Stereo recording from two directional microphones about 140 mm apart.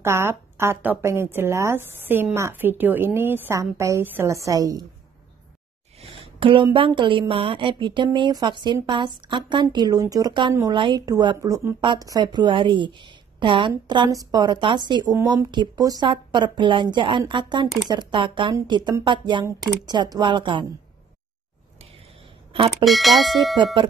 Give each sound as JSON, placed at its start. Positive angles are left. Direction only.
{"t": 0.0, "sound": "a woman's voice", "side_deg": -20}
{"t": 5.9, "sound": "speech", "side_deg": -40}
{"t": 22.8, "sound": "speech", "side_deg": 0}
{"t": 23.6, "sound": "speech", "side_deg": -35}